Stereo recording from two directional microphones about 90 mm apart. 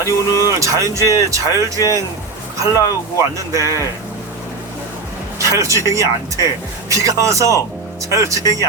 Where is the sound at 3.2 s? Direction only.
35° right (ahead or behind).